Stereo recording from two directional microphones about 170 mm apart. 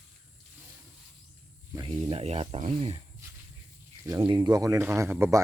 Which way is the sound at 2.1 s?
40° right (ahead or behind).